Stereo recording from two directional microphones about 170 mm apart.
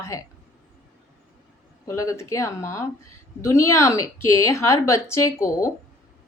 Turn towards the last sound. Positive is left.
turn(degrees=15)  # may be behind; listen again after turning